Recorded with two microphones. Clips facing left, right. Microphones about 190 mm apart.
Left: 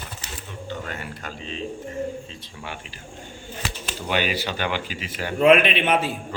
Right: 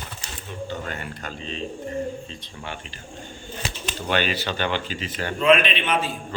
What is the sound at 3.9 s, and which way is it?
Speech, 10° left (ahead or behind).